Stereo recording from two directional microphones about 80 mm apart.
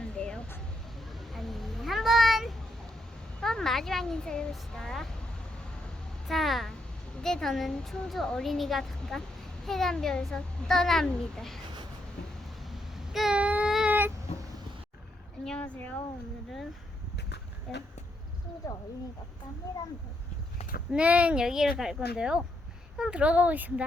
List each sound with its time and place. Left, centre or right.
0.0 s vehicle: centre
0.9 s a sound: centre
3.4 s speech: centre
6.2 s a child's voice: centre
12.6 s a sound: centre
13.3 s child singing: centre
15.4 s speech: centre
17.7 s a woman's voice: centre
18.6 s speech: left
20.9 s speech: centre